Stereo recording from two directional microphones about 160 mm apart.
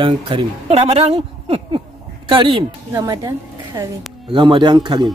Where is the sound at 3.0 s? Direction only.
20° right (ahead or behind).